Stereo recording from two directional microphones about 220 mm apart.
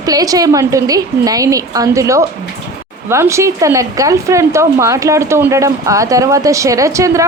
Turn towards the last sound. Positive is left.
turn(degrees=-15)  # may be behind; listen again after turning